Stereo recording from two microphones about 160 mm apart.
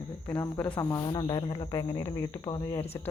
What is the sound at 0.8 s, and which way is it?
Speech, 25° left (ahead or behind).